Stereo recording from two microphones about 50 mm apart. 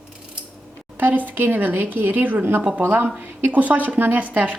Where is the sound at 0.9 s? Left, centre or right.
Right.